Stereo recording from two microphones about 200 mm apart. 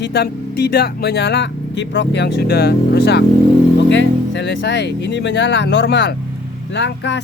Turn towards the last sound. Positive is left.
turn(degrees=60)  # may be behind; listen again after turning